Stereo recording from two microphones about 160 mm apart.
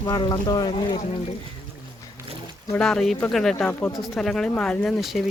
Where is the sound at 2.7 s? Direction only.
5° left (ahead or behind).